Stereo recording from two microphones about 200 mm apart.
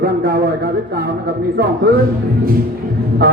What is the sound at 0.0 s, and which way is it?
A man's voice, 50° right (ahead or behind).